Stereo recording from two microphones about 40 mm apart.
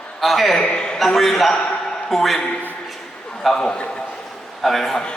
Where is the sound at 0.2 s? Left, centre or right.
Centre.